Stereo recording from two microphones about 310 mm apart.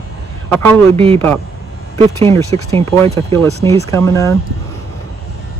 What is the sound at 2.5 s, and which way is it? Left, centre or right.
Speech, centre.